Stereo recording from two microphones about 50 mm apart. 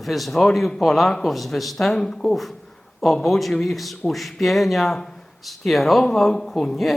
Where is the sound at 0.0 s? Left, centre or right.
Centre.